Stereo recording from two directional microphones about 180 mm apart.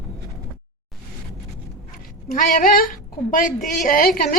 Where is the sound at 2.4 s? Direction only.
50° left (ahead or behind).